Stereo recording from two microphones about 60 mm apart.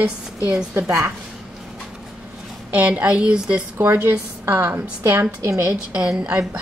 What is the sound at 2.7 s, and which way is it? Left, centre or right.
Speech, right.